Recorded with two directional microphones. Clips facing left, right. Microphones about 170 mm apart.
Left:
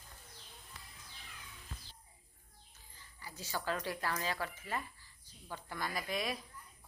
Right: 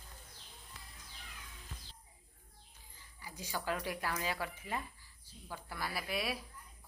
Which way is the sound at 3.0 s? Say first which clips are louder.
Right 1 dB; 10° right (ahead or behind).